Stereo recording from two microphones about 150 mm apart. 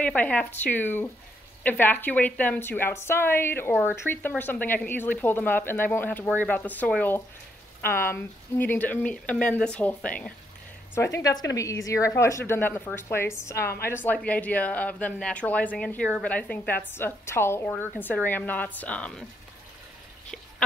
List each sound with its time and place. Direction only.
0.0 s a woman's voice: 10° left (ahead or behind)